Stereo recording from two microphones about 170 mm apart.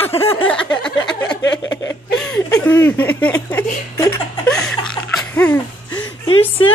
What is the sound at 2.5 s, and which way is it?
Speech, 10° left (ahead or behind).